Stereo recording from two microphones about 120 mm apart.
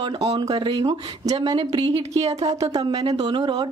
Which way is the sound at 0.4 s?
40° right (ahead or behind).